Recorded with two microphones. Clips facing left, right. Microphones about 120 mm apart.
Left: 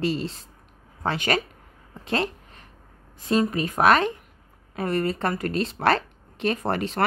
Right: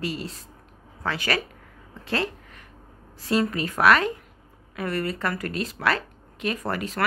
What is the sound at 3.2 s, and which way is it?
A woman's voice, 20° left (ahead or behind).